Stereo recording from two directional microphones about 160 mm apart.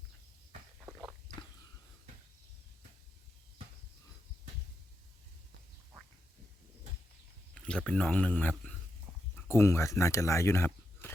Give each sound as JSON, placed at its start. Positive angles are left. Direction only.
{"t": 7.5, "sound": "speech", "side_deg": 5}